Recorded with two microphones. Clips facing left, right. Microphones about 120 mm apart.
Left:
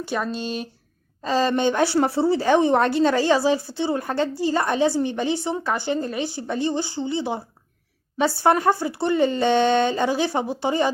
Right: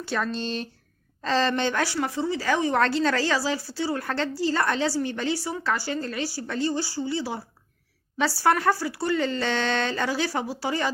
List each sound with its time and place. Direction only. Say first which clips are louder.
0.0 s a woman's voice: left 2 dB; 15° left (ahead or behind)